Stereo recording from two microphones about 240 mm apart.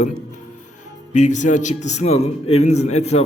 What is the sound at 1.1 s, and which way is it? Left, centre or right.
A man's voice, left.